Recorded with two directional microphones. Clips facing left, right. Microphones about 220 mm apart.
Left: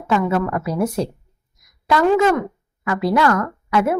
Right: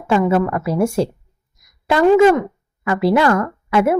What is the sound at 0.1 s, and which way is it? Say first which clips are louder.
Speech: right 3 dB; 25° right (ahead or behind).